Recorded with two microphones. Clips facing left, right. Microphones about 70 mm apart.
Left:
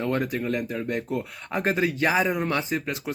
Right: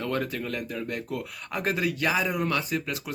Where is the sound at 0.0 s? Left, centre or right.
Left.